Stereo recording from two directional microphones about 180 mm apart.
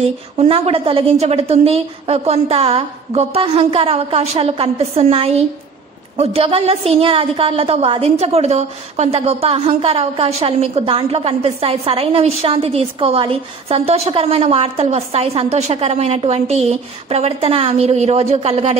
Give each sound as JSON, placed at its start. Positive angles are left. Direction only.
{"t": 0.4, "sound": "a woman's voice", "side_deg": -30}